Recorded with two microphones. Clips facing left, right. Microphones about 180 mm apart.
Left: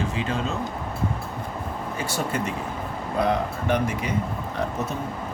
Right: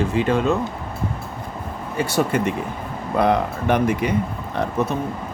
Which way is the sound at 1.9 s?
65° right (ahead or behind).